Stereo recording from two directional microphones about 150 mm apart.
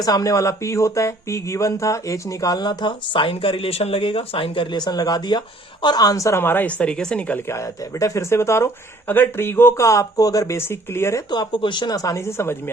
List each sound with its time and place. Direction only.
0.0 s a woman's voice: 25° left (ahead or behind)
11.3 s speech: 30° left (ahead or behind)